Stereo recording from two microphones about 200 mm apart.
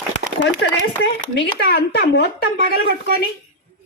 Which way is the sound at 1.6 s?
55° left (ahead or behind).